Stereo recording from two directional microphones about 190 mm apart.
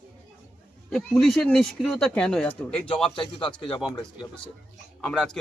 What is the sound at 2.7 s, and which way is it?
Speech, 30° left (ahead or behind).